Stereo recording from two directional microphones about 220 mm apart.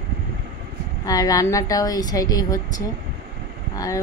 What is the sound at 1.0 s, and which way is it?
A woman's voice, 15° left (ahead or behind).